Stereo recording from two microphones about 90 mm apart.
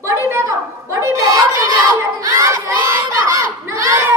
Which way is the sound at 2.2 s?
35° right (ahead or behind).